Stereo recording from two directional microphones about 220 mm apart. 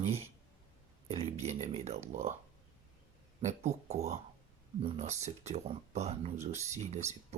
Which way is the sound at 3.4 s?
30° right (ahead or behind).